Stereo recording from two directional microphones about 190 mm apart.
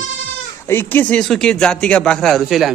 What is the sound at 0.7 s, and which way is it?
Speech, 10° left (ahead or behind).